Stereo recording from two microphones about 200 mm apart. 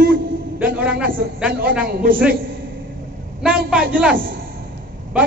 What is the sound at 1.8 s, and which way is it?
Speech, 45° right (ahead or behind).